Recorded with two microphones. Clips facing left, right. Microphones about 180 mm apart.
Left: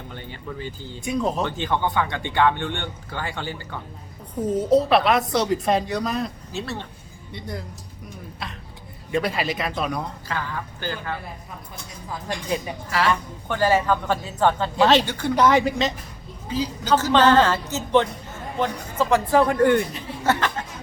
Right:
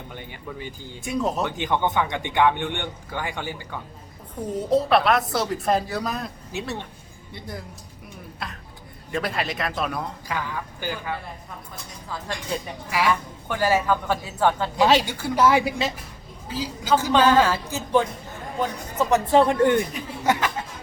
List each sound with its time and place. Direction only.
0.1 s a woman's voice: 10° right (ahead or behind)
1.0 s speech: centre (ahead or behind)
1.5 s a woman's voice: 15° right (ahead or behind)
4.5 s speech: centre (ahead or behind)
6.5 s a woman's voice: 15° right (ahead or behind)
7.3 s speech: centre (ahead or behind)
10.2 s a woman's voice: 10° right (ahead or behind)
12.9 s a woman's voice: 10° right (ahead or behind)
18.9 s speech: 20° right (ahead or behind)
20.2 s speech: 10° right (ahead or behind)